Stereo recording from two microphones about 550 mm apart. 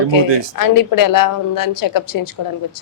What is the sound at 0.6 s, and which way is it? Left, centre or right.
A woman's voice, left.